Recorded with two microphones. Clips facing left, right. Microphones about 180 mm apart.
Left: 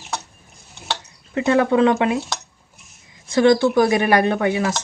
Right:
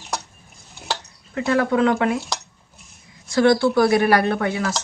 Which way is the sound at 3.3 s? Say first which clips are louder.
Left 2 dB; 20° left (ahead or behind).